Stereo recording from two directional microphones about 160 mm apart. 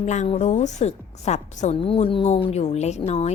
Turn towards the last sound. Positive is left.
turn(degrees=40)  # may be behind; listen again after turning